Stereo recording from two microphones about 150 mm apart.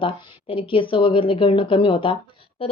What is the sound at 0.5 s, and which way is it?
Speech, 35° left (ahead or behind).